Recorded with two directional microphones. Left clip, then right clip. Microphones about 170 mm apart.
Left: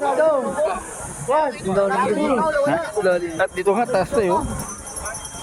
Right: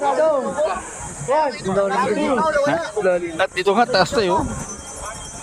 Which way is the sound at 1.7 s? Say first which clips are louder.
Even; 35° right (ahead or behind).